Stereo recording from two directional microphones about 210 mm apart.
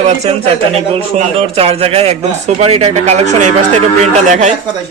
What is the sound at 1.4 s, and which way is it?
Speech, 30° right (ahead or behind).